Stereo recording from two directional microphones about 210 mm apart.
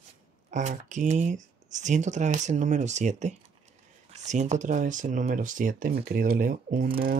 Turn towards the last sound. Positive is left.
turn(degrees=-40)  # may be behind; listen again after turning